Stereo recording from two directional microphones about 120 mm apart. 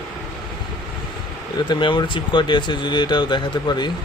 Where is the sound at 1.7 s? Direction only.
40° left (ahead or behind).